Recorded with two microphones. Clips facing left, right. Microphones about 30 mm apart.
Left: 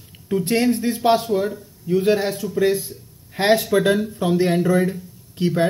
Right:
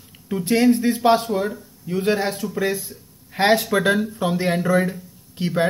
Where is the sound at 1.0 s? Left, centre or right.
Centre.